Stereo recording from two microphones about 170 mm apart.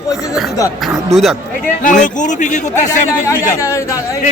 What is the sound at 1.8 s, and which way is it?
Speech, 45° left (ahead or behind).